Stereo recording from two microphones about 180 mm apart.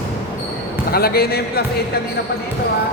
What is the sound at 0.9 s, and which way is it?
Speech, 55° left (ahead or behind).